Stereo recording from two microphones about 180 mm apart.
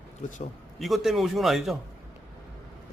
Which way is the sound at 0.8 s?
Centre (ahead or behind).